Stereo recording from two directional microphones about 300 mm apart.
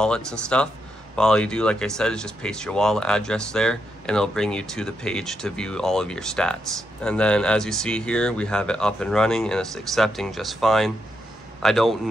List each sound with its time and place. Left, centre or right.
0.0 s speech: centre